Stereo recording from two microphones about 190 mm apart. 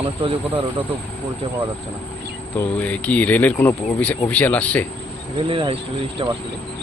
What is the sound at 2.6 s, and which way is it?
Speech, 5° left (ahead or behind).